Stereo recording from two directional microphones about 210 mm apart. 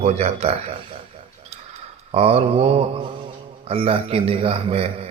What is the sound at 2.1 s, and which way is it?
A man's voice, 30° right (ahead or behind).